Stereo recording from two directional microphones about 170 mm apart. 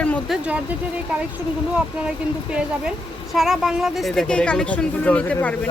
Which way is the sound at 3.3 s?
Centre (ahead or behind).